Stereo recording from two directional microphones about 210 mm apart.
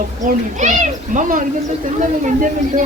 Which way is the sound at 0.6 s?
35° right (ahead or behind).